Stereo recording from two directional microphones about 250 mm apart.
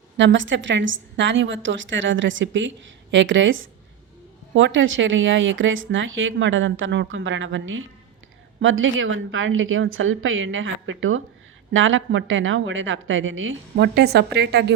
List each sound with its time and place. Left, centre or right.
0.2 s a woman's voice: right